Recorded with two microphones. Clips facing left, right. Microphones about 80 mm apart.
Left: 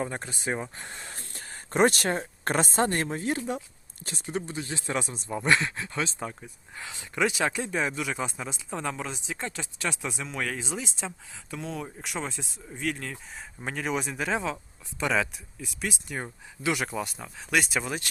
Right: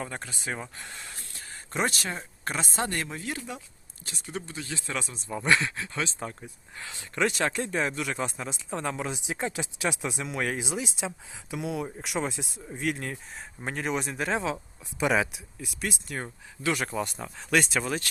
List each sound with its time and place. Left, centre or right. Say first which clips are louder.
0.0 s speech: left 4 dB; left
7.2 s speech: even; centre
15.3 s speech: even; centre